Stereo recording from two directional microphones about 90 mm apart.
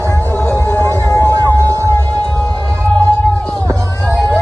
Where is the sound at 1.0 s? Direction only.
35° left (ahead or behind).